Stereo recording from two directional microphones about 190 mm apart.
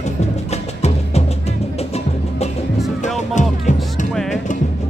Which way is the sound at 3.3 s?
40° left (ahead or behind).